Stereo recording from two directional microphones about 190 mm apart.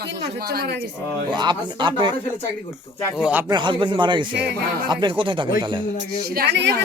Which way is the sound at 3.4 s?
25° right (ahead or behind).